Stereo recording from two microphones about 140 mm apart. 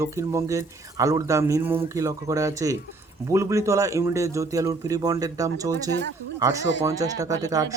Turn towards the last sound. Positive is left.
turn(degrees=-25)  # may be behind; listen again after turning